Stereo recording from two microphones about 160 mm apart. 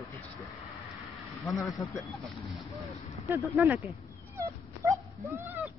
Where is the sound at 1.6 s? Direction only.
20° left (ahead or behind).